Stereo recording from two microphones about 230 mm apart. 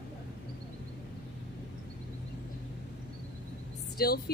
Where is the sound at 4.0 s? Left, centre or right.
Left.